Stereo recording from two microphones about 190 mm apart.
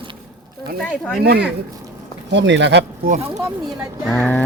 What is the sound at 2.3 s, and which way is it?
Speech, 70° right (ahead or behind).